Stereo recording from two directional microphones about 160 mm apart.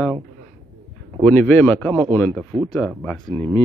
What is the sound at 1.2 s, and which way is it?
Speech, 10° left (ahead or behind).